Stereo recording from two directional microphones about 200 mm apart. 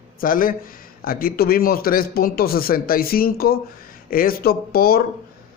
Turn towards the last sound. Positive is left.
turn(degrees=50)  # may be behind; listen again after turning